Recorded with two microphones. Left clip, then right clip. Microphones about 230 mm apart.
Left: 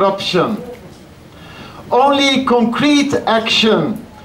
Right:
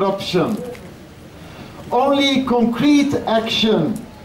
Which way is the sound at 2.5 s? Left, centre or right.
Left.